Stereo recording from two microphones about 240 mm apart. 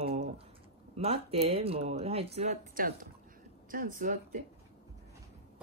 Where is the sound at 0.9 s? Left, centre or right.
Right.